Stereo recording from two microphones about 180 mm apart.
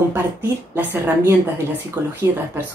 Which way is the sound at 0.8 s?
10° right (ahead or behind).